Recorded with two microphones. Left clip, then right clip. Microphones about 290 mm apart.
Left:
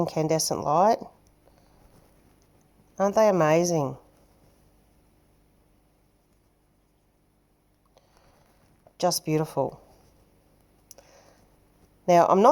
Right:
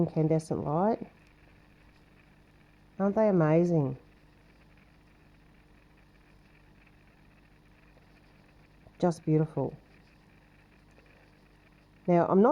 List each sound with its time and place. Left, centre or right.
0.0 s speech: centre
3.1 s speech: centre
9.0 s speech: centre
12.2 s speech: centre